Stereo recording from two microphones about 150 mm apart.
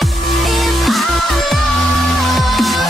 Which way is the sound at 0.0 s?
Centre (ahead or behind).